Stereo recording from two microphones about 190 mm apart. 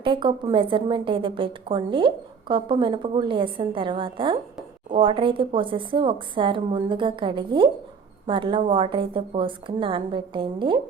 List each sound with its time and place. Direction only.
0.0 s a woman's voice: 25° right (ahead or behind)